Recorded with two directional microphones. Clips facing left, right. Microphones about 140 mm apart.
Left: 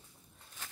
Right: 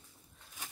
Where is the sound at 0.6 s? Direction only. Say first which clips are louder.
Right 1 dB; 15° right (ahead or behind).